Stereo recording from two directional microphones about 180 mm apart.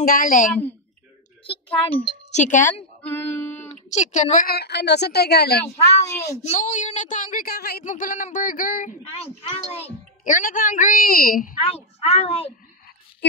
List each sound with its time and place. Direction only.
0.0 s a child's voice: 50° left (ahead or behind)
1.7 s a child's voice: 35° left (ahead or behind)
3.0 s a sound: 10° left (ahead or behind)
3.6 s a sound: 40° left (ahead or behind)
4.5 s a woman's voice: 65° left (ahead or behind)
6.4 s a child's voice: 40° left (ahead or behind); by 7.8 s 60° left (ahead or behind)
7.8 s a child's voice: 45° left (ahead or behind)
9.1 s a child's voice: 35° left (ahead or behind); by 11.5 s 50° left (ahead or behind)
11.6 s a child's voice: 35° left (ahead or behind)